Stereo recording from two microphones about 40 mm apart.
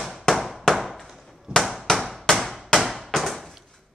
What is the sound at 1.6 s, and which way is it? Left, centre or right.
Chop, centre.